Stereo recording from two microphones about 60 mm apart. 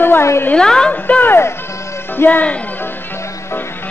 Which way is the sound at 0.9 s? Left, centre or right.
Left.